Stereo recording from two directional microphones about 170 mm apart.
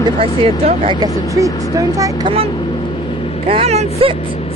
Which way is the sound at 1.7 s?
20° right (ahead or behind).